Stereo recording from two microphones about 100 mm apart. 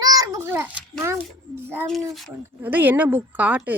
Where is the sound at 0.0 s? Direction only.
40° right (ahead or behind).